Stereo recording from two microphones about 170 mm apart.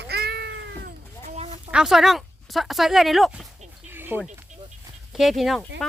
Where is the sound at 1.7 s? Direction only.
Centre (ahead or behind).